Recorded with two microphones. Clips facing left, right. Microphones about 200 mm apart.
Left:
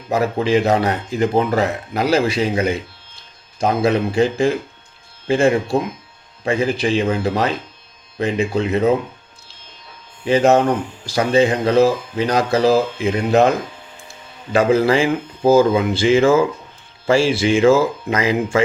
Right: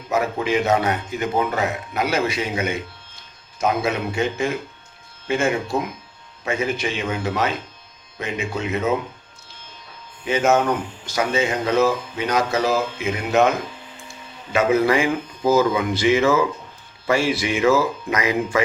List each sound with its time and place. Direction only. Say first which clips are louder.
0.1 s speech: left 4 dB; 35° left (ahead or behind)
10.2 s speech: left 5 dB; 35° left (ahead or behind)
14.5 s speech: left 3 dB; 30° left (ahead or behind)